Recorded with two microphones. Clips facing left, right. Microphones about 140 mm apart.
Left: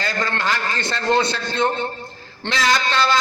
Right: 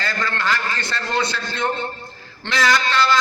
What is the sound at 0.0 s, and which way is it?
A man's voice, 20° left (ahead or behind).